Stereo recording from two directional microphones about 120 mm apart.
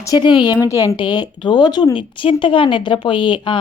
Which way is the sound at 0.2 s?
40° left (ahead or behind).